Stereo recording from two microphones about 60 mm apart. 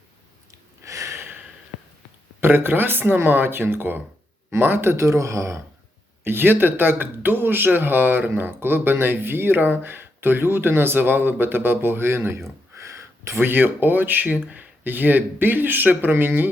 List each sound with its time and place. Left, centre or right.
0.8 s a sound: right
2.4 s speech: right
6.2 s speech: right